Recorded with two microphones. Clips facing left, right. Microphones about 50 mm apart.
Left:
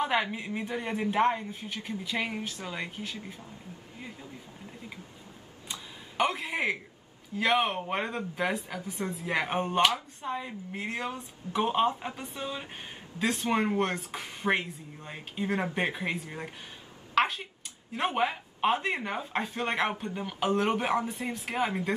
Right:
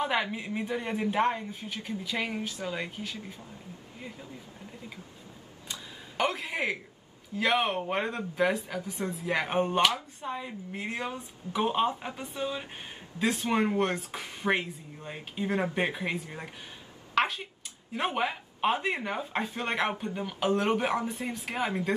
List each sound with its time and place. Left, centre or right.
0.0 s speech: centre
5.7 s a sound: centre
6.4 s a man's voice: left
7.3 s a woman's voice: centre